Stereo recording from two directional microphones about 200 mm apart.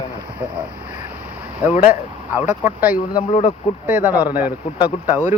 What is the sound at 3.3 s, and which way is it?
Speech, 25° left (ahead or behind).